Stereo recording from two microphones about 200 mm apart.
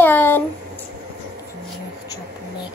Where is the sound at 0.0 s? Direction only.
10° left (ahead or behind).